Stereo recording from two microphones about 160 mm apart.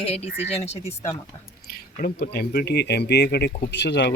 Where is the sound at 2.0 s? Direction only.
75° left (ahead or behind).